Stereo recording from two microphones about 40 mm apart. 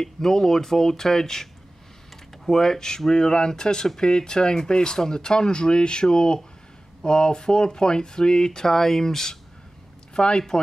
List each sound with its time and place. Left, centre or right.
0.0 s speech: centre
10.1 s speech: left